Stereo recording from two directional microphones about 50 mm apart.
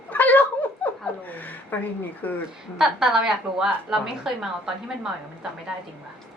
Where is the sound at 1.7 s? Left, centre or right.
Left.